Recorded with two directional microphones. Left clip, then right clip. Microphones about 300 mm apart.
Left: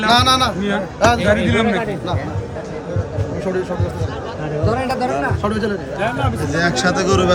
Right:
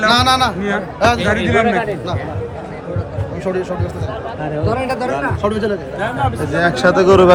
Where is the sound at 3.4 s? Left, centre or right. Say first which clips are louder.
Right 2 dB; centre.